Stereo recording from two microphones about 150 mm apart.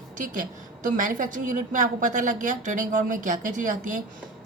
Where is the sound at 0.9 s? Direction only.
60° right (ahead or behind).